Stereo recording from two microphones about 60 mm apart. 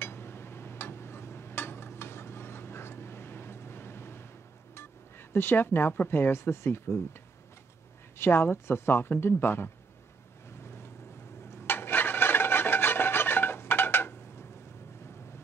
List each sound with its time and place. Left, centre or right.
0.0 s a sound: left
5.3 s a woman's voice: left
8.2 s a woman's voice: left
10.6 s boat: left
11.5 s filing: left